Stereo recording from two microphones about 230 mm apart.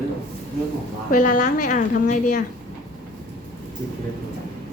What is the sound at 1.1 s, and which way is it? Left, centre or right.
A woman's voice, left.